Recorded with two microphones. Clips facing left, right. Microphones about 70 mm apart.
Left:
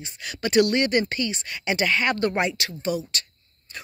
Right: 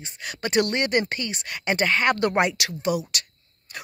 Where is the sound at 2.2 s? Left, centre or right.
Right.